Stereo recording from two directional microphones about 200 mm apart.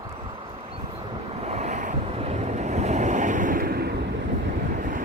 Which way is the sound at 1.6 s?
35° right (ahead or behind).